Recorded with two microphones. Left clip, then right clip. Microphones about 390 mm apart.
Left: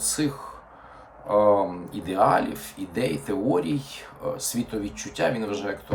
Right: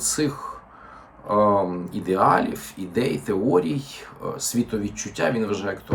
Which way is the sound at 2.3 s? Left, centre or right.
Centre.